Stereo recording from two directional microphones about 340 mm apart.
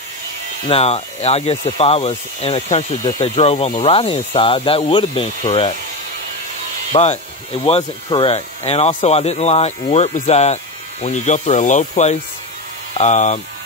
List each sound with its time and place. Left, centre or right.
0.7 s speech: centre
6.9 s speech: centre